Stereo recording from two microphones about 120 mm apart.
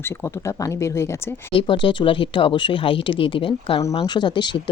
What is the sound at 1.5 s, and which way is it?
Speech, 45° left (ahead or behind).